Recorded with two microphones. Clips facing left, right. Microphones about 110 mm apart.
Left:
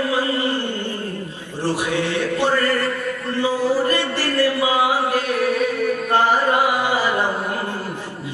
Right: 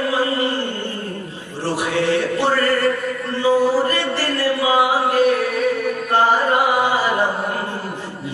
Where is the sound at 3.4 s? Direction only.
15° left (ahead or behind).